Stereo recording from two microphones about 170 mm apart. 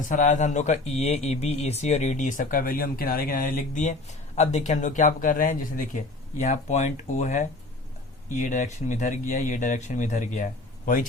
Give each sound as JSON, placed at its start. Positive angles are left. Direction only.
{"t": 0.0, "sound": "speech", "side_deg": 50}